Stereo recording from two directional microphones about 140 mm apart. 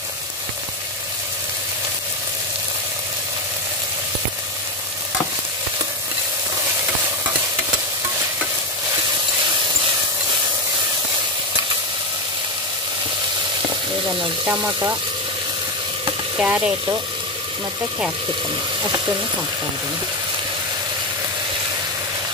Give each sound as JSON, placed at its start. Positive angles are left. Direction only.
{"t": 14.4, "sound": "speech", "side_deg": -15}
{"t": 16.3, "sound": "speech", "side_deg": -10}